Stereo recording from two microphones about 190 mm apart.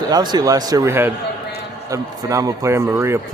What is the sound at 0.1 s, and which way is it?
Speech, 20° right (ahead or behind).